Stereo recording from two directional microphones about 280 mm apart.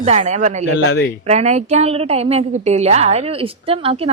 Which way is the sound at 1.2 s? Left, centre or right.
Right.